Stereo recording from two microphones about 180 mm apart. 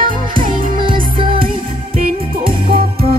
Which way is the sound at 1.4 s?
55° right (ahead or behind).